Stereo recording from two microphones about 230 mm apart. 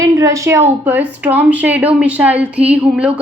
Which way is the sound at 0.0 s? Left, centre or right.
Centre.